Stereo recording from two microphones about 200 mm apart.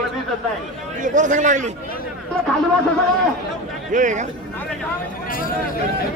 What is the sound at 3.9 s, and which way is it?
Speech, 40° right (ahead or behind).